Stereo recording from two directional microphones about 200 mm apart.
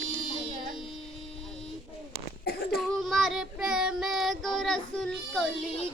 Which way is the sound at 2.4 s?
55° left (ahead or behind).